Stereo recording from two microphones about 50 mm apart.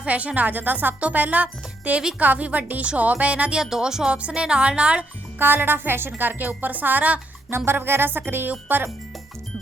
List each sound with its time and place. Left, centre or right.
0.0 s speech: right
3.6 s speech: centre
5.4 s speech: right
6.1 s speech: right
7.5 s speech: right